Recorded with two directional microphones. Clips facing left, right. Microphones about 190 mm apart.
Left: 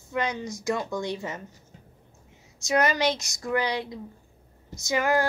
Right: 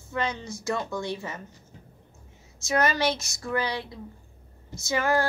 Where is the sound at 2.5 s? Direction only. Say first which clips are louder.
Left 1 dB; 15° left (ahead or behind).